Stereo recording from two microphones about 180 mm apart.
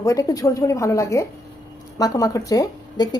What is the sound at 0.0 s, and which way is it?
A woman's voice, 20° left (ahead or behind).